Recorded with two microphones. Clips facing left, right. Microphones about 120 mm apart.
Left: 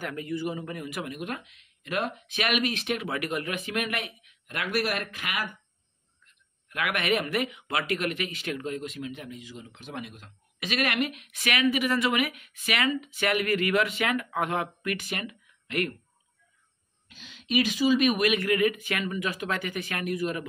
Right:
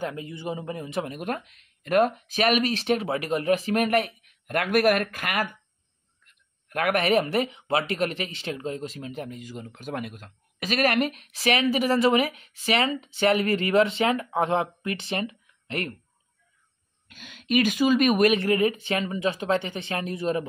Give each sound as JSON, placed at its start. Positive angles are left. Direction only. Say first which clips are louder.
{"t": 0.0, "sound": "speech", "louder": "even", "side_deg": -25}
{"t": 6.7, "sound": "speech", "louder": "right 5 dB", "side_deg": -40}
{"t": 17.1, "sound": "speech", "louder": "right 4 dB", "side_deg": -55}